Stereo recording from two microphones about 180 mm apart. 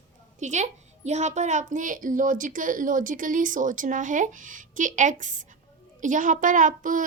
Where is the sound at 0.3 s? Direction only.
40° right (ahead or behind).